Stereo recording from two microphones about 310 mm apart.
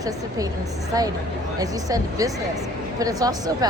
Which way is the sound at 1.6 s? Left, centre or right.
Centre.